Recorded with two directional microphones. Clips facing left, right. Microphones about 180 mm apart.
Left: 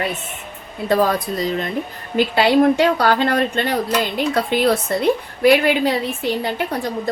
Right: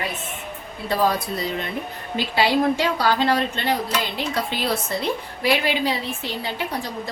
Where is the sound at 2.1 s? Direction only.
55° left (ahead or behind).